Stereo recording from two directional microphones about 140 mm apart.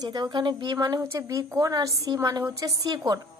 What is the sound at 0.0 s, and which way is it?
A woman's voice, 30° right (ahead or behind).